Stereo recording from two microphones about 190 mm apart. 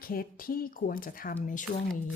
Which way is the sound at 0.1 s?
50° left (ahead or behind).